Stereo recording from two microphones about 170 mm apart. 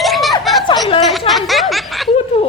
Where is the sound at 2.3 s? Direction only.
30° left (ahead or behind).